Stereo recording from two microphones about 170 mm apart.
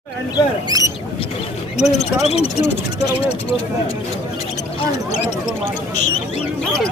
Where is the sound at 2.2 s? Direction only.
40° left (ahead or behind).